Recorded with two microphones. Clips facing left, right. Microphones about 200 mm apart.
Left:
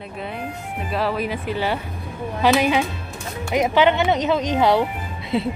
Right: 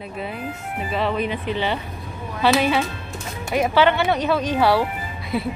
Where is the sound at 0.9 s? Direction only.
5° left (ahead or behind).